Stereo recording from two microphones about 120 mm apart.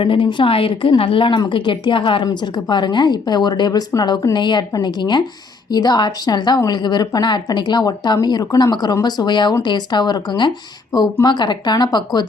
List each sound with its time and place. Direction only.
0.0 s a woman's voice: 45° left (ahead or behind)